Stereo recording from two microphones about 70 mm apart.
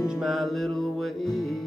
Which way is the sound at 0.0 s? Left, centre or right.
Centre.